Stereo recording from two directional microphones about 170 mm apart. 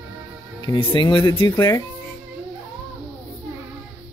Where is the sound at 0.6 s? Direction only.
30° left (ahead or behind).